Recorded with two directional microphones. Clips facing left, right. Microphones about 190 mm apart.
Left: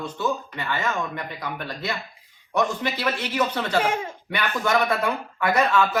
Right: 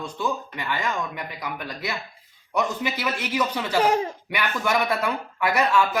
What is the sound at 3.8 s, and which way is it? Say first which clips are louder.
Speech: right 4 dB; 35° right (ahead or behind).